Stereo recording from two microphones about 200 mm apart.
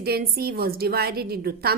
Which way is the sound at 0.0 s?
50° right (ahead or behind).